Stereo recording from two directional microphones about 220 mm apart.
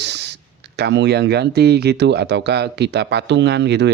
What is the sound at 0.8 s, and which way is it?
Speech, 50° right (ahead or behind).